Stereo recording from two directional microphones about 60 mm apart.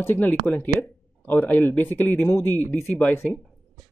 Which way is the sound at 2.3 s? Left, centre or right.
Left.